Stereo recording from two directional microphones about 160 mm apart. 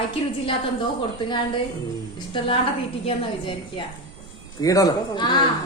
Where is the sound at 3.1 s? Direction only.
30° left (ahead or behind).